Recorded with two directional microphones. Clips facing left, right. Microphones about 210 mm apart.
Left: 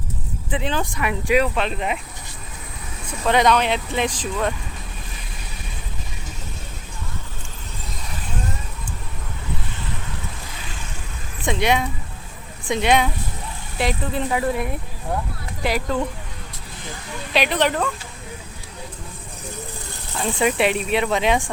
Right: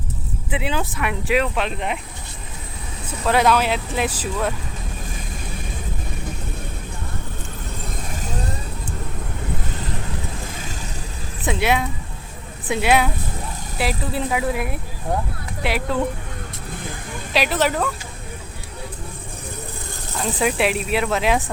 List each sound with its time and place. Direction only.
0.5 s speech: 5° right (ahead or behind)
3.1 s speech: 5° right (ahead or behind)
8.1 s vehicle: 40° right (ahead or behind)
11.4 s speech: 5° right (ahead or behind)
17.3 s speech: 5° right (ahead or behind)
20.1 s speech: centre (ahead or behind)